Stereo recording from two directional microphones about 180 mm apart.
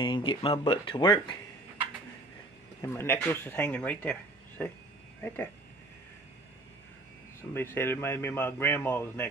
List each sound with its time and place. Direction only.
0.0 s speech: 25° left (ahead or behind)
2.8 s speech: 15° left (ahead or behind)
7.5 s speech: 10° left (ahead or behind)